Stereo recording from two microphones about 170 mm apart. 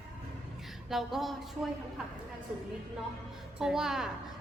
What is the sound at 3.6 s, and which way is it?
Speech, 5° right (ahead or behind).